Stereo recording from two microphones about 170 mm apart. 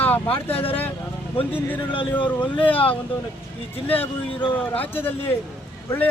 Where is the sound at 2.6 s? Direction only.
10° left (ahead or behind).